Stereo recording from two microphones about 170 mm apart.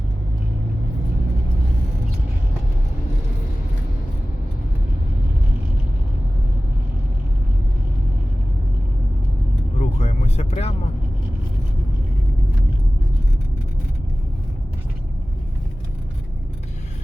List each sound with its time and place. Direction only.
9.7 s vehicle: 40° left (ahead or behind)